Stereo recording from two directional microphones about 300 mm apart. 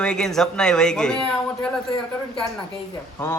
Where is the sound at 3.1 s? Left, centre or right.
Centre.